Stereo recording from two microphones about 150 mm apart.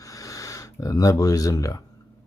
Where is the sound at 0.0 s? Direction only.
20° left (ahead or behind).